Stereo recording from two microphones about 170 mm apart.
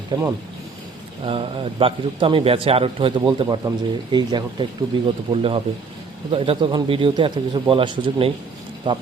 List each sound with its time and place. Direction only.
0.1 s a man's voice: 25° right (ahead or behind)